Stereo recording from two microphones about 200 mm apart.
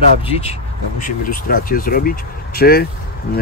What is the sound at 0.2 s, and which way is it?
Speech, 30° left (ahead or behind).